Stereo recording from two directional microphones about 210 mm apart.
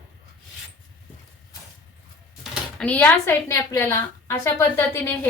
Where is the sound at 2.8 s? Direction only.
5° left (ahead or behind).